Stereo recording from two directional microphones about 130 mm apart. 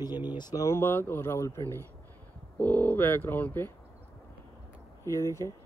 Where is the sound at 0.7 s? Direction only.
20° left (ahead or behind).